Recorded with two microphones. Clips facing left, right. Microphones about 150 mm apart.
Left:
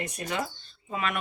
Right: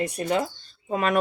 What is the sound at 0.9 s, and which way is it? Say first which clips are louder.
Speech: right 8 dB; 45° right (ahead or behind).